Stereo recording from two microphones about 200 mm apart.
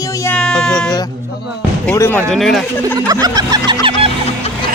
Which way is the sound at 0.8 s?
20° left (ahead or behind).